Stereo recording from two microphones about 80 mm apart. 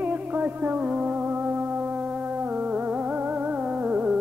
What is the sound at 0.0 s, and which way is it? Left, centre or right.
Music, centre.